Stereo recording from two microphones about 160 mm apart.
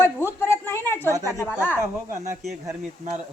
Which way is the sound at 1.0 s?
20° right (ahead or behind).